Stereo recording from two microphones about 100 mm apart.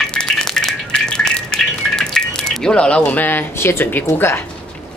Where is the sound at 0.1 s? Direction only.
10° left (ahead or behind).